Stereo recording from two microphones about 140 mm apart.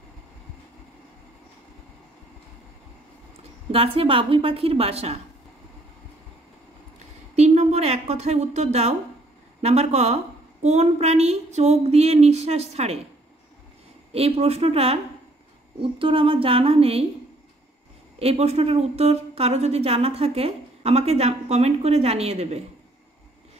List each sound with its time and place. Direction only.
3.7 s a woman's voice: 45° right (ahead or behind)
7.3 s a sound: 55° right (ahead or behind)
9.6 s a woman's voice: 50° right (ahead or behind)
14.1 s a woman's voice: 45° right (ahead or behind)
18.2 s a woman's voice: 50° right (ahead or behind)